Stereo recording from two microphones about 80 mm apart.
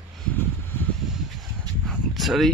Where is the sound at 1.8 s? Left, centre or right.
Centre.